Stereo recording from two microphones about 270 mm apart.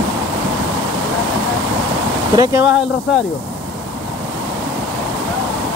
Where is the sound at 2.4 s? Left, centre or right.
Centre.